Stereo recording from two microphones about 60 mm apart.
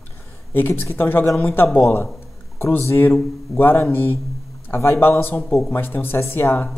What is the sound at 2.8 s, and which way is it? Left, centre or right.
Speech, left.